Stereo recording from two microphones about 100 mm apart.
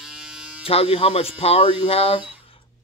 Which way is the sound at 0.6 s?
75° left (ahead or behind).